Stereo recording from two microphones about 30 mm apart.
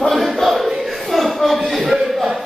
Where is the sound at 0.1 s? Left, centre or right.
Centre.